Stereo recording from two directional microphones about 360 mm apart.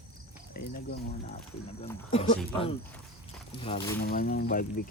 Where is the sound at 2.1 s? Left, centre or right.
Centre.